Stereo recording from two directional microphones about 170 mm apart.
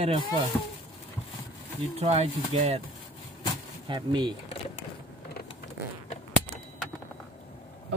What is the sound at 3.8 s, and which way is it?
Speech, 25° right (ahead or behind).